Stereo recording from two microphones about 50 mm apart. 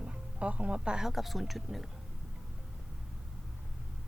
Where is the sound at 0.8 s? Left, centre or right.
Centre.